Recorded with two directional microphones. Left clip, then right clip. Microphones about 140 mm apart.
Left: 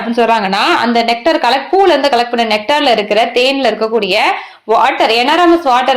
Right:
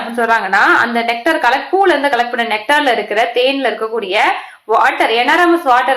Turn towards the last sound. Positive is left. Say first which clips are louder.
# left 1 dB
turn(degrees=35)  # may be behind; listen again after turning